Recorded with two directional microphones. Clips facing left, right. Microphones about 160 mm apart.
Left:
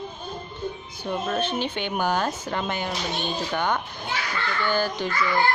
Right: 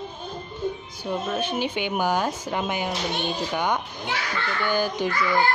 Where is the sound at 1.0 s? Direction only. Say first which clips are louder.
Even; 10° right (ahead or behind).